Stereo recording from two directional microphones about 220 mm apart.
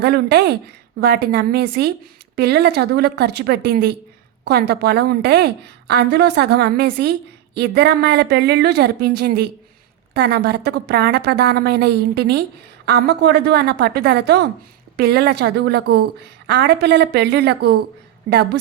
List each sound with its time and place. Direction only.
0.0 s a woman's voice: 50° right (ahead or behind)